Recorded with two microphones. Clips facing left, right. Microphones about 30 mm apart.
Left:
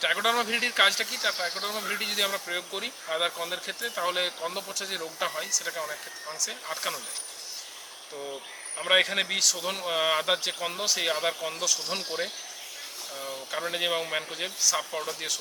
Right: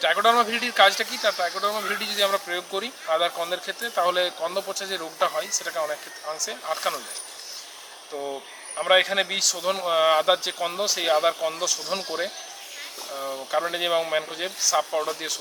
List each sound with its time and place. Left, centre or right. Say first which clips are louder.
0.0 s a man's voice: right 6 dB; centre
8.1 s speech: right 7 dB; centre
8.7 s a man's voice: right 4 dB; centre
13.1 s speech: right 6 dB; centre
13.5 s a man's voice: right 5 dB; centre